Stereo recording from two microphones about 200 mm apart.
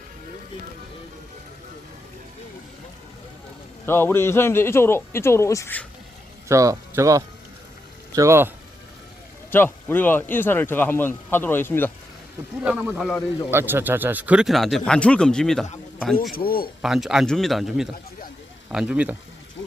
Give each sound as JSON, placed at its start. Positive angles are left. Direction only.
{"t": 3.8, "sound": "speech", "side_deg": 10}
{"t": 6.5, "sound": "speech", "side_deg": -15}
{"t": 9.5, "sound": "speech", "side_deg": 10}
{"t": 12.6, "sound": "a man's voice", "side_deg": -5}
{"t": 13.5, "sound": "a man's voice", "side_deg": -10}
{"t": 16.3, "sound": "speech", "side_deg": 45}
{"t": 16.8, "sound": "a man's voice", "side_deg": 0}